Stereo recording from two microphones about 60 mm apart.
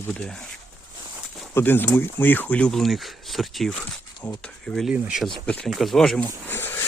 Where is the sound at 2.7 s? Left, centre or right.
Centre.